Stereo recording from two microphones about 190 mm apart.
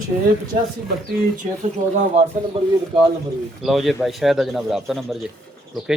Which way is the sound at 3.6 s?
Centre (ahead or behind).